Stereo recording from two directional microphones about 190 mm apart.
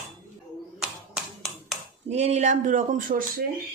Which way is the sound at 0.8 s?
Centre (ahead or behind).